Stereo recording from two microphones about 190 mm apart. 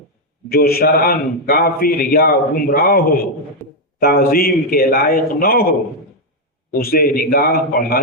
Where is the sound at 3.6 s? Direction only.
10° left (ahead or behind).